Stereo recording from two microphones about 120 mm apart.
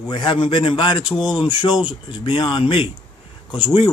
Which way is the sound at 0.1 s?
40° left (ahead or behind).